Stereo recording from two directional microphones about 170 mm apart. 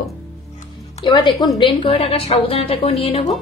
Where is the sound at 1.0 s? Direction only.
25° left (ahead or behind).